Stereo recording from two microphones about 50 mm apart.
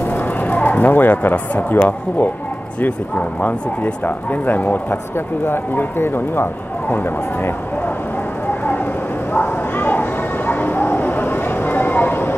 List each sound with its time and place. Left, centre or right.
0.1 s speech: left
5.1 s speech: left
9.3 s a sound: left